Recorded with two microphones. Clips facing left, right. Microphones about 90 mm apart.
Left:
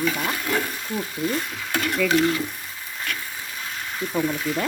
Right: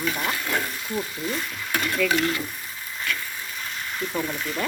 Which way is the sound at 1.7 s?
85° left.